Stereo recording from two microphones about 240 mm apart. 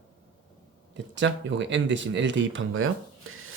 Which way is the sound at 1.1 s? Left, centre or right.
Right.